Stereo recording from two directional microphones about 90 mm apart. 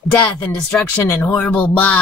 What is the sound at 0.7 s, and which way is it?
Speech, 20° left (ahead or behind).